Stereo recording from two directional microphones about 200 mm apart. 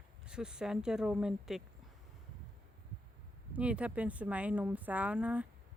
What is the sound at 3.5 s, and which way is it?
Speech, 5° right (ahead or behind).